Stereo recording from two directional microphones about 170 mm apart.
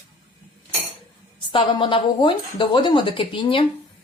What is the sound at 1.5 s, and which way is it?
Speech, 30° left (ahead or behind).